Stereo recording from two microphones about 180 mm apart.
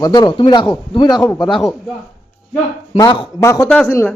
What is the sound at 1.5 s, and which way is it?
Speech, centre (ahead or behind).